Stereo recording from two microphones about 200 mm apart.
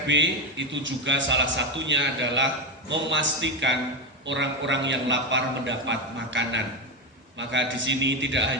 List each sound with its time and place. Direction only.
0.1 s a man's voice: 65° right (ahead or behind)